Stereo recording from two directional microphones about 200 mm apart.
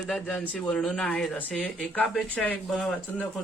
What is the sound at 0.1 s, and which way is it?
Speech, 5° left (ahead or behind).